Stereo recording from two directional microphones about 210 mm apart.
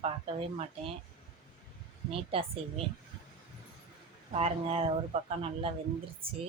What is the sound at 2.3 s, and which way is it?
Speech, 30° right (ahead or behind).